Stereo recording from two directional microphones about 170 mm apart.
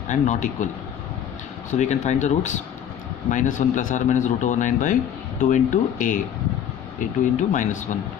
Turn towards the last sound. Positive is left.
turn(degrees=45)  # may be behind; listen again after turning